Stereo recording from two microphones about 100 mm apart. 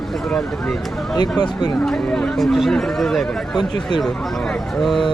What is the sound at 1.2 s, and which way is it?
Speech, 45° left (ahead or behind).